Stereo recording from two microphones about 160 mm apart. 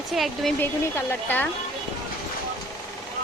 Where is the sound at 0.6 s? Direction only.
10° left (ahead or behind).